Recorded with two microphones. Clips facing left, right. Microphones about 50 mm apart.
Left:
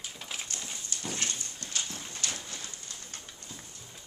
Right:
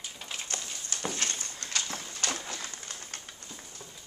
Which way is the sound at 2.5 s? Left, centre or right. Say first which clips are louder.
Right 4 dB; right.